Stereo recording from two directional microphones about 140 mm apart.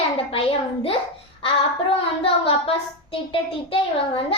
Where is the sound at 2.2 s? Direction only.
40° left (ahead or behind).